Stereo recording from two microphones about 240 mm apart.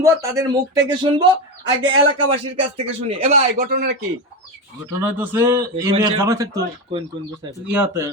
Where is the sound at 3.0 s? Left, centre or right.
Right.